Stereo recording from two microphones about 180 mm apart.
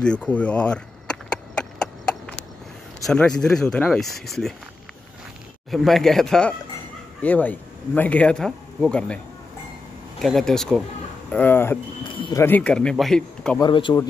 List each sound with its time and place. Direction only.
0.0 s speech: 5° left (ahead or behind)
3.1 s speech: 5° left (ahead or behind)
5.7 s speech: centre (ahead or behind)
12.1 s a sound: 30° left (ahead or behind)
12.4 s speech: 10° left (ahead or behind)
13.6 s speech: 25° left (ahead or behind)